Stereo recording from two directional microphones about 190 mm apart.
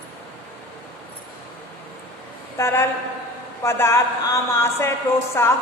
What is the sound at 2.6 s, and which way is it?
A woman's voice, 15° left (ahead or behind).